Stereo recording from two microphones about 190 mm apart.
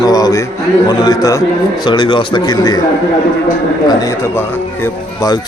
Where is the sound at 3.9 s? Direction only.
20° left (ahead or behind).